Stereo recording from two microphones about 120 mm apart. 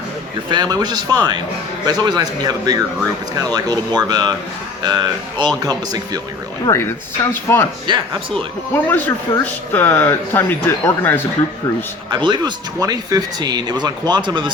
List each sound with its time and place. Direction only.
0.5 s speech: 35° right (ahead or behind)
6.7 s speech: 20° left (ahead or behind)
7.9 s speech: 40° right (ahead or behind)
8.7 s speech: 15° left (ahead or behind)
12.1 s speech: 40° right (ahead or behind)